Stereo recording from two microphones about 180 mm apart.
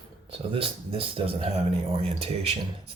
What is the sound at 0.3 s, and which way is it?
Speech, 30° right (ahead or behind).